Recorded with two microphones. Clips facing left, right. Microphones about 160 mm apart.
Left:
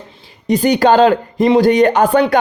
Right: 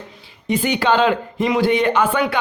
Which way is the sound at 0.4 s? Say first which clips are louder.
Left 7 dB; 40° left (ahead or behind).